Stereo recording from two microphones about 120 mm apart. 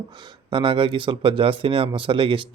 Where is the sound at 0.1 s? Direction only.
40° right (ahead or behind).